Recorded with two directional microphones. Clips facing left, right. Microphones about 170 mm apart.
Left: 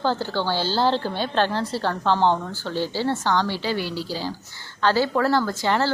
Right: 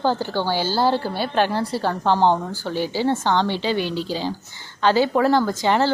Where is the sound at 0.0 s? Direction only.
15° right (ahead or behind).